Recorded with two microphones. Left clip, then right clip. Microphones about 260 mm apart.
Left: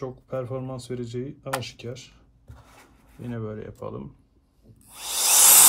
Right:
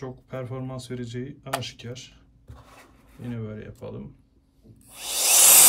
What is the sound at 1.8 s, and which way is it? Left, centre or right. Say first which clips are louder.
Speech: left 2 dB; centre.